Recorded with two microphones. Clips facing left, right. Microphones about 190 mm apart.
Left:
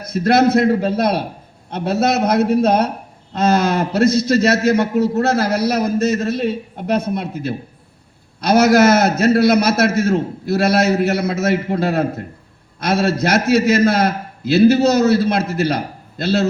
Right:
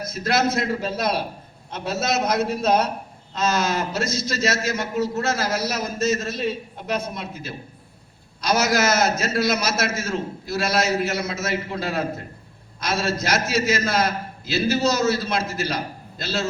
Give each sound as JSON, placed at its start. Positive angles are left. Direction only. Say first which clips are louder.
{"t": 0.1, "sound": "a man's voice", "louder": "left 9 dB", "side_deg": 60}